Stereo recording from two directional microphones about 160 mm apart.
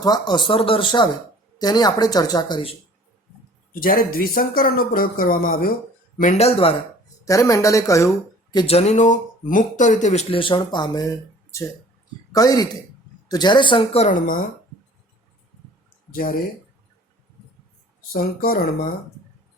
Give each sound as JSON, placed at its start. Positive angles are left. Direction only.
{"t": 0.0, "sound": "speech", "side_deg": 25}
{"t": 3.7, "sound": "speech", "side_deg": 60}
{"t": 6.1, "sound": "speech", "side_deg": 50}
{"t": 7.3, "sound": "speech", "side_deg": 20}
{"t": 8.5, "sound": "speech", "side_deg": 40}
{"t": 12.3, "sound": "speech", "side_deg": 25}
{"t": 14.1, "sound": "speech", "side_deg": 55}
{"t": 16.1, "sound": "speech", "side_deg": 65}
{"t": 18.1, "sound": "speech", "side_deg": 65}